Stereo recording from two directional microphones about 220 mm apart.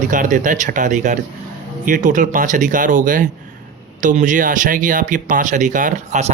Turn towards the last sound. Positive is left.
turn(degrees=-35)  # may be behind; listen again after turning